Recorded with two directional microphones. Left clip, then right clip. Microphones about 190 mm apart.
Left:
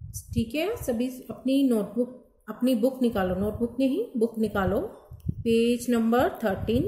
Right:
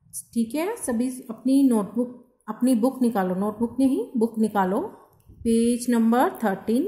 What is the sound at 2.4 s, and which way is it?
A woman's voice, 15° right (ahead or behind).